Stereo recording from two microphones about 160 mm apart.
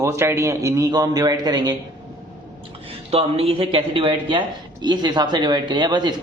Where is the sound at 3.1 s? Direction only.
35° right (ahead or behind).